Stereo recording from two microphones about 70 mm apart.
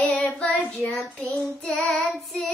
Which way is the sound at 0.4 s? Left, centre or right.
Centre.